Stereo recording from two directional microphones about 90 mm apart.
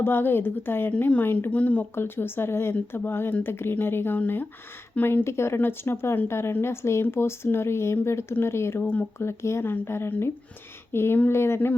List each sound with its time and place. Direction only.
0.0 s speech: 25° left (ahead or behind)